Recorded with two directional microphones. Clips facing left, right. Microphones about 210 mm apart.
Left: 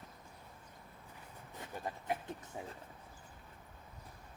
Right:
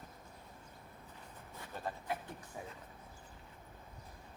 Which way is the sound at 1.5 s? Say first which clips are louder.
Even; 20° left (ahead or behind).